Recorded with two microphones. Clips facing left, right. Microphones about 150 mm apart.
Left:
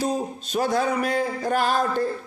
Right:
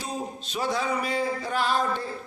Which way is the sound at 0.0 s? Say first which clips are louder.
Left 7 dB; 45° left (ahead or behind).